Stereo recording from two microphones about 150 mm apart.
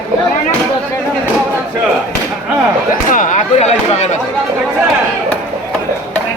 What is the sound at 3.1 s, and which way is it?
Chop, 60° left (ahead or behind).